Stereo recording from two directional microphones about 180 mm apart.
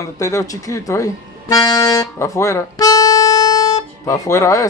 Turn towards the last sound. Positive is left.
turn(degrees=15)  # may be behind; listen again after turning